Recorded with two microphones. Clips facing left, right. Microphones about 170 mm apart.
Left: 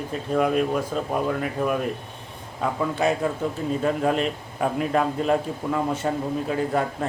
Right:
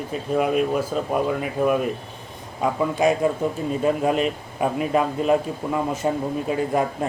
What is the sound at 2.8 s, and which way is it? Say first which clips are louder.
A man's voice: right 3 dB; 15° right (ahead or behind).